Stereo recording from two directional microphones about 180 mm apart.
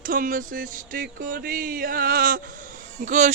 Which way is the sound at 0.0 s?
50° right (ahead or behind).